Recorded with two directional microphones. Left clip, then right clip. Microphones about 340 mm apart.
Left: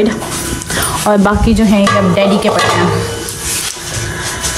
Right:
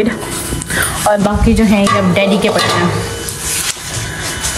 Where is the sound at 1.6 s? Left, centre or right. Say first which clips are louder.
Even; centre.